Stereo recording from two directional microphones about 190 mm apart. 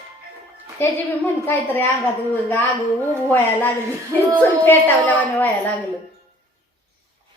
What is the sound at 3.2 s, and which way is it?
A woman's voice, 10° left (ahead or behind).